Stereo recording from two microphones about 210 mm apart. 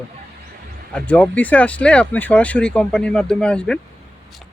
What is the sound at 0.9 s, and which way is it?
Speech, 5° left (ahead or behind).